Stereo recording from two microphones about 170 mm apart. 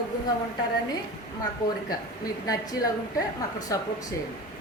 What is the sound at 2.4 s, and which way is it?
A woman's voice, 20° left (ahead or behind).